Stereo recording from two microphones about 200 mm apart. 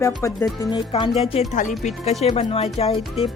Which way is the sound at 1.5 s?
40° left (ahead or behind).